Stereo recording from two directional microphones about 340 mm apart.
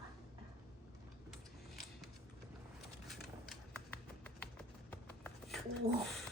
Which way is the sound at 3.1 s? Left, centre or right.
Centre.